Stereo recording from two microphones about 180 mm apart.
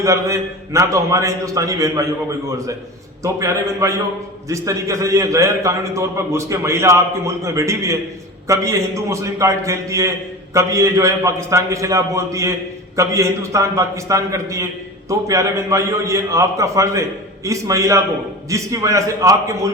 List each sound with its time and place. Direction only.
0.0 s a man's voice: 15° right (ahead or behind)
3.2 s a man's voice: 15° right (ahead or behind)